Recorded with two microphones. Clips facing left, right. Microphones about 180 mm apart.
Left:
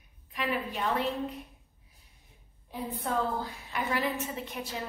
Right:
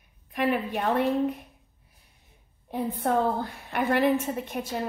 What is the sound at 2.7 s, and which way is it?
A woman's voice, 60° right (ahead or behind).